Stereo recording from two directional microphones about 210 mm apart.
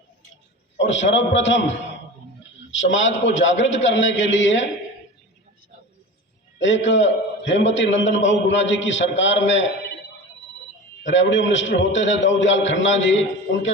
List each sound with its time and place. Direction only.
0.8 s a man's voice: 60° left (ahead or behind)
6.6 s a man's voice: 60° left (ahead or behind)
11.0 s a man's voice: 60° left (ahead or behind)